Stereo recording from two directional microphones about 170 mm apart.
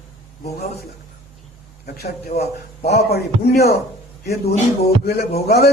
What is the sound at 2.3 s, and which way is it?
A man's voice, 70° left (ahead or behind).